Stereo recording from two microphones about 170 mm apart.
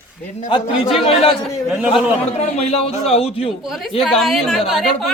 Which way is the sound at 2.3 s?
40° left (ahead or behind).